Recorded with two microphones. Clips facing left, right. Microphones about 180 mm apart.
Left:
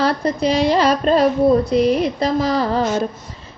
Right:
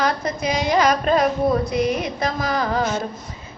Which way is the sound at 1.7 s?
30° left (ahead or behind).